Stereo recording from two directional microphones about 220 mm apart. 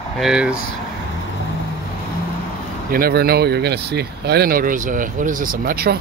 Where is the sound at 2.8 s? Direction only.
40° right (ahead or behind).